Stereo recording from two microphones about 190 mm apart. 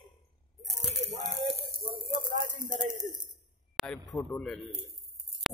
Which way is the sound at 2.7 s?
45° right (ahead or behind).